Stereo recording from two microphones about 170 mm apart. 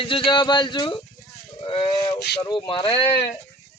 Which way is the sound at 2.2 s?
75° left (ahead or behind).